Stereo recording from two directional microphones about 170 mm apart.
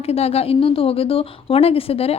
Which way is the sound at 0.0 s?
35° left (ahead or behind).